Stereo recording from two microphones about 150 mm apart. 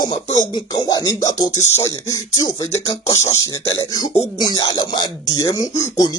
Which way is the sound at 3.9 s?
25° left (ahead or behind).